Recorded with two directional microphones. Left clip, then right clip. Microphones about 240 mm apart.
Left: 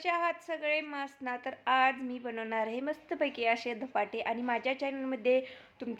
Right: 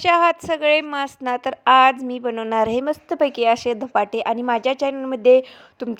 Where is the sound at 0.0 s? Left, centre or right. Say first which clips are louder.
Right 16 dB; right.